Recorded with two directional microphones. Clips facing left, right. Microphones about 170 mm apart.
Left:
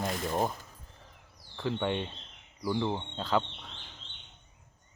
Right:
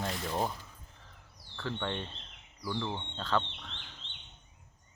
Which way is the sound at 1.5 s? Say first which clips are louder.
Left 5 dB; 15° left (ahead or behind).